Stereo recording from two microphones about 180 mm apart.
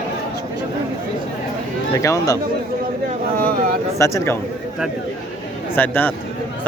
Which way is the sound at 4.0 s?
15° left (ahead or behind).